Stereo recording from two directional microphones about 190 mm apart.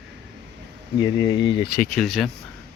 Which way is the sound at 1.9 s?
Centre (ahead or behind).